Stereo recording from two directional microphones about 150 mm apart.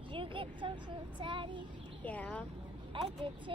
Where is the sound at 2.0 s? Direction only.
10° left (ahead or behind).